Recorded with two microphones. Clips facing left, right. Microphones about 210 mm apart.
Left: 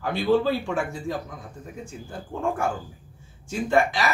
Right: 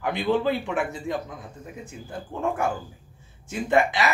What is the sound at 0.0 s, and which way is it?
Speech, 15° right (ahead or behind).